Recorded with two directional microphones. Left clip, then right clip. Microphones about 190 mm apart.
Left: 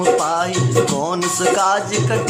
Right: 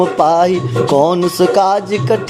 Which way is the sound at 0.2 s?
30° right (ahead or behind).